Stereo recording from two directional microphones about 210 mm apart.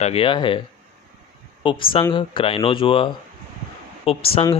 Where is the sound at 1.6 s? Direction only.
25° left (ahead or behind).